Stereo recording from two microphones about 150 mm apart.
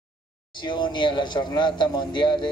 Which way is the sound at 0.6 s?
30° left (ahead or behind).